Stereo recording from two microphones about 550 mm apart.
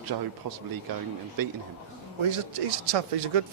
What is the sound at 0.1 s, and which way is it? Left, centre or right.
Speech, right.